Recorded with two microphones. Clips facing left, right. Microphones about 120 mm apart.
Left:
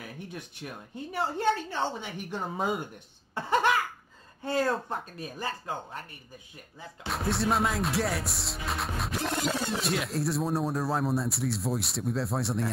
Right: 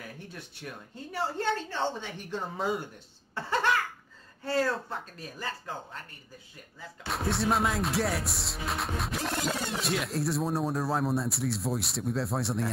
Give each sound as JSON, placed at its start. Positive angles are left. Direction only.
{"t": 0.3, "sound": "a woman's voice", "side_deg": 15}
{"t": 3.3, "sound": "cough", "side_deg": 15}
{"t": 4.5, "sound": "speech", "side_deg": 20}
{"t": 7.1, "sound": "music", "side_deg": 0}